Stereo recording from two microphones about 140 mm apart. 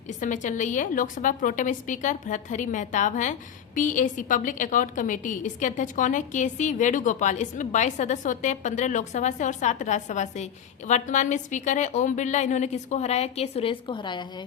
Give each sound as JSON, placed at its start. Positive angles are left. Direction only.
{"t": 0.1, "sound": "a woman's voice", "side_deg": 60}